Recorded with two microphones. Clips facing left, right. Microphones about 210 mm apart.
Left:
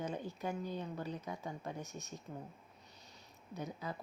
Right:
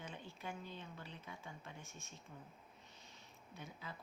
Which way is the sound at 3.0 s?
40° left (ahead or behind).